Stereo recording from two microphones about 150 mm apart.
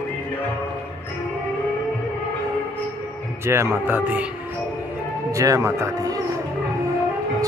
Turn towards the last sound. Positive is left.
turn(degrees=-20)  # may be behind; listen again after turning